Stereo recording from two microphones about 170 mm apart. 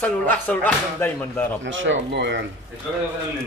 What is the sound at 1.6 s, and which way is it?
Speech, 90° right.